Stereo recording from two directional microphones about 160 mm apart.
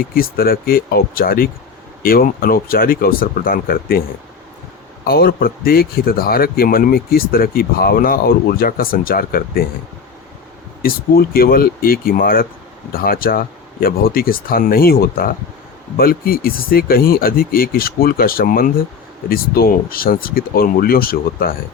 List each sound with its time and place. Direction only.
0.1 s speech: 65° left (ahead or behind)
5.0 s speech: 70° left (ahead or behind)
10.8 s speech: 70° left (ahead or behind)